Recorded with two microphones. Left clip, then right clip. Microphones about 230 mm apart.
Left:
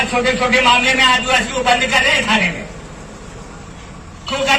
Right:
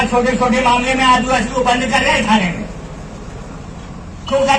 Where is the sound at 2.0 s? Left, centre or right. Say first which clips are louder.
Even; left.